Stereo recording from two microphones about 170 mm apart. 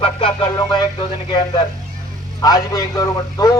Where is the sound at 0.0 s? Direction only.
30° left (ahead or behind).